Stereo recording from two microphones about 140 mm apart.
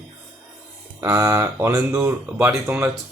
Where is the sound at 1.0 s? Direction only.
20° right (ahead or behind).